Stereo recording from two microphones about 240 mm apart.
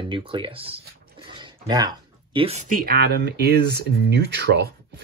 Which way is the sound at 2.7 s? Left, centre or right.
Right.